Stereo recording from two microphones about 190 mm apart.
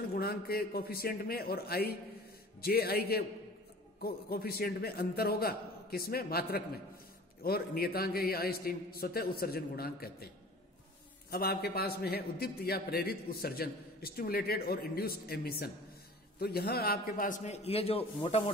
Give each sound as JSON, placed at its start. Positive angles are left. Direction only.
{"t": 0.1, "sound": "a man's voice", "side_deg": 55}